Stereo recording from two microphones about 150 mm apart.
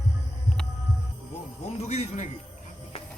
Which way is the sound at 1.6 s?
50° left (ahead or behind).